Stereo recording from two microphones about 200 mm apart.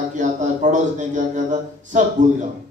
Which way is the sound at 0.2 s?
40° right (ahead or behind).